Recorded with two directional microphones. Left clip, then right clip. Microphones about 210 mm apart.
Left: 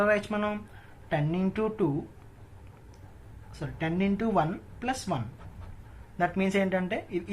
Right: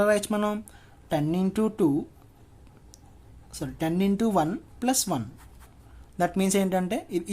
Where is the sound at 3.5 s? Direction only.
45° right (ahead or behind).